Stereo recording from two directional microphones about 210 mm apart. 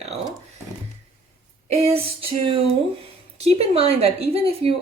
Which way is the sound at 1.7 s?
30° right (ahead or behind).